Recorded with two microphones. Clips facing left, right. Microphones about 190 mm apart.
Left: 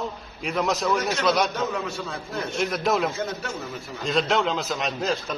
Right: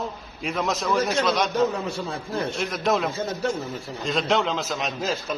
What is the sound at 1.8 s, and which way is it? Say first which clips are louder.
Speech: right 2 dB; 30° right (ahead or behind).